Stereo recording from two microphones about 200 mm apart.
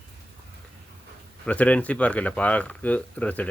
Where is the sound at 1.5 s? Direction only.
5° left (ahead or behind).